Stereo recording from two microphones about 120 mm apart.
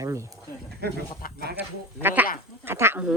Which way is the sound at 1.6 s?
15° right (ahead or behind).